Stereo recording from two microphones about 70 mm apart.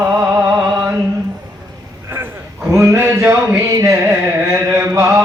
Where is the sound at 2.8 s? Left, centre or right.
Right.